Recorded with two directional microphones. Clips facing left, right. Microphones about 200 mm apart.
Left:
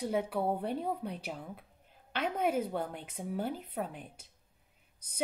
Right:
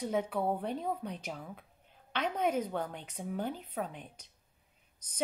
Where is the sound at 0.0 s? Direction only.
10° left (ahead or behind).